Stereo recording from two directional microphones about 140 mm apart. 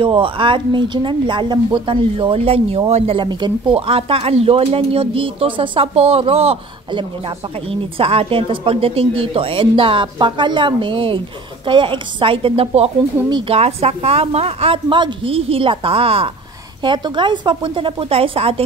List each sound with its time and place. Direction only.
0.0 s a woman's voice: 40° right (ahead or behind)